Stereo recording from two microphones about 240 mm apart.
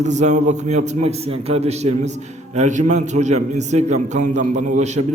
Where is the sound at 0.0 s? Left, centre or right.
Right.